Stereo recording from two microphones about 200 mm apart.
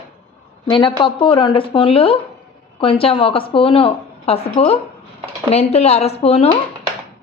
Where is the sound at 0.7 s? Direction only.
25° left (ahead or behind).